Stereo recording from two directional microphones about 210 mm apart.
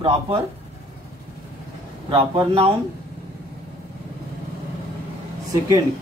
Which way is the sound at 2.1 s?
30° right (ahead or behind).